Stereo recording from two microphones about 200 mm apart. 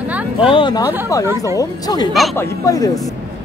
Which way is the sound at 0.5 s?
25° left (ahead or behind).